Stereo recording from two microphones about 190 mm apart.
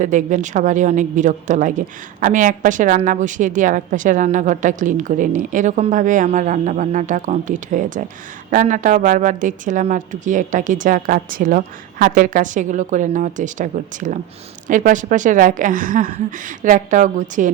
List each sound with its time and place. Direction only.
0.0 s a woman's voice: 40° right (ahead or behind)